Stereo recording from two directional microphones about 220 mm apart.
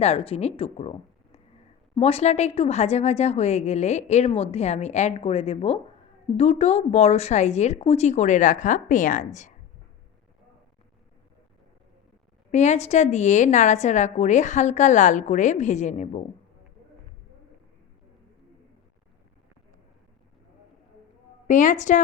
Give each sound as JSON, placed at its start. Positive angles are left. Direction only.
{"t": 0.0, "sound": "a woman's voice", "side_deg": 25}
{"t": 12.5, "sound": "a woman's voice", "side_deg": 30}
{"t": 21.4, "sound": "a woman's voice", "side_deg": 35}